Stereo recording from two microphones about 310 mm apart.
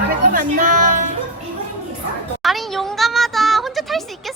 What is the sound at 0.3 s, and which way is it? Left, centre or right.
Speech, right.